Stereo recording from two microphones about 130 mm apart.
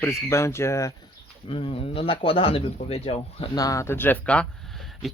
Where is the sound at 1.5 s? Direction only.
45° left (ahead or behind).